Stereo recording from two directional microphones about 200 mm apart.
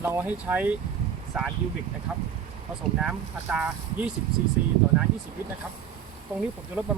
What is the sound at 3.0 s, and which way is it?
Speech, 5° right (ahead or behind).